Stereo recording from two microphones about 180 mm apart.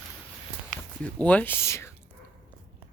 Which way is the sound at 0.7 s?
5° left (ahead or behind).